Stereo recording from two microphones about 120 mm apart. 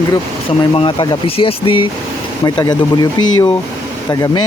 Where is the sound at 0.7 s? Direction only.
45° left (ahead or behind).